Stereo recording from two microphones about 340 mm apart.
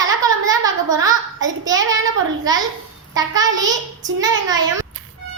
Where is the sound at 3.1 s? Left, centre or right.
Centre.